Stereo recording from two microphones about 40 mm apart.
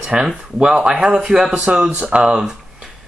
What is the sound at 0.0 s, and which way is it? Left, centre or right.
Speech, right.